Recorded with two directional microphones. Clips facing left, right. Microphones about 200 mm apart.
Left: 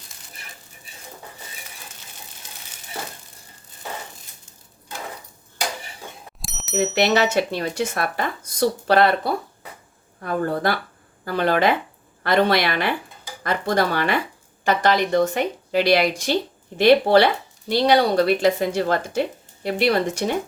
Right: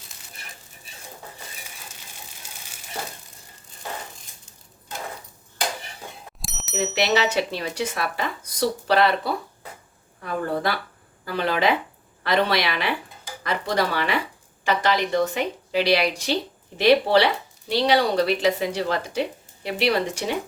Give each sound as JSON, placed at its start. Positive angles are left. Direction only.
{"t": 6.4, "sound": "bicycle bell", "side_deg": 0}
{"t": 6.9, "sound": "a woman's voice", "side_deg": 55}
{"t": 10.2, "sound": "a woman's voice", "side_deg": 45}